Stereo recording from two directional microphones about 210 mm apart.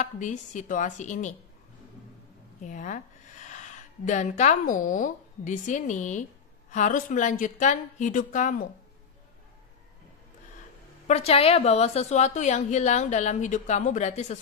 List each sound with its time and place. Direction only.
0.0 s a woman's voice: 35° left (ahead or behind)
2.6 s a woman's voice: 35° left (ahead or behind)
11.1 s a woman's voice: 30° left (ahead or behind)